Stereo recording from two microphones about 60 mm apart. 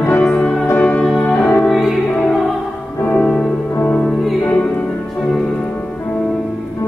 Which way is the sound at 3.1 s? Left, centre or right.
Centre.